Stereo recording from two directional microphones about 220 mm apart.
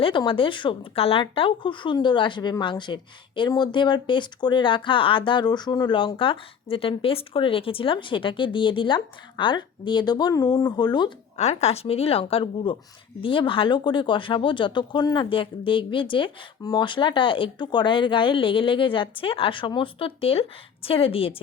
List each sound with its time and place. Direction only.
0.0 s speech: 20° left (ahead or behind)
11.3 s speech: 30° left (ahead or behind)